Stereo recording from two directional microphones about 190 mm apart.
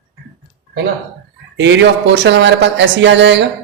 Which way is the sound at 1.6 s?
70° right (ahead or behind).